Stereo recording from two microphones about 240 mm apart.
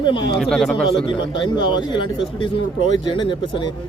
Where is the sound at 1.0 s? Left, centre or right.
Centre.